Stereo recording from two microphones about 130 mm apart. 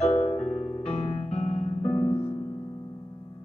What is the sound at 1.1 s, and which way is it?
Music, 55° left (ahead or behind).